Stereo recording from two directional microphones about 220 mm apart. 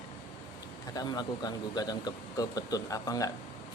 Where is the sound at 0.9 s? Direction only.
20° left (ahead or behind).